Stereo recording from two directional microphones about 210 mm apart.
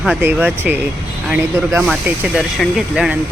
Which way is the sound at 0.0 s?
5° right (ahead or behind).